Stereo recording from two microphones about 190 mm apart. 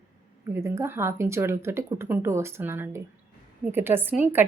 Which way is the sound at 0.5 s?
15° right (ahead or behind).